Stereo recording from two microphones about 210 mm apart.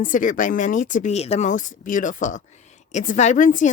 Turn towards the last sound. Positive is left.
turn(degrees=40)  # may be behind; listen again after turning